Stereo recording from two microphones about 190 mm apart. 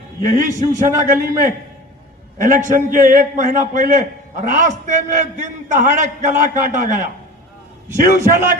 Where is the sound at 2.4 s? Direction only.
45° right (ahead or behind).